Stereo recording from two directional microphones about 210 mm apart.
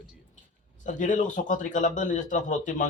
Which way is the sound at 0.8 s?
35° left (ahead or behind).